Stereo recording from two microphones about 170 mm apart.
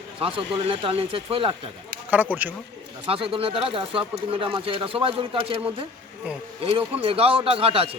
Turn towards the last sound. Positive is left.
turn(degrees=-35)  # may be behind; listen again after turning